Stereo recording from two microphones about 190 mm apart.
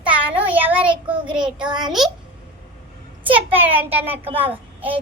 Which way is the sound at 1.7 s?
20° right (ahead or behind).